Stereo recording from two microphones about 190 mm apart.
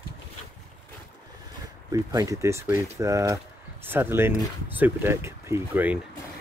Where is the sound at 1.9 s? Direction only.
20° right (ahead or behind).